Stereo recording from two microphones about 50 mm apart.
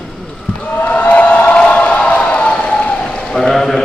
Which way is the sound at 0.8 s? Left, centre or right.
Left.